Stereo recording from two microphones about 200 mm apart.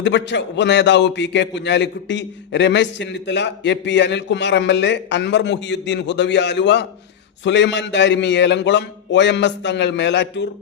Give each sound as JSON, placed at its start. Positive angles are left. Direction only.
{"t": 0.0, "sound": "a man's voice", "side_deg": 60}